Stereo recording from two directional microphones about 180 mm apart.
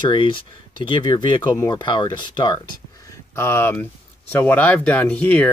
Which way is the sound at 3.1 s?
15° left (ahead or behind).